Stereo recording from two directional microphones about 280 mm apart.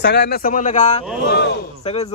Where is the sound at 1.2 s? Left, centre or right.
Left.